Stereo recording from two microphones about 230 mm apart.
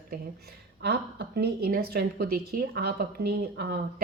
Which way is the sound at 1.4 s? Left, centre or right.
Right.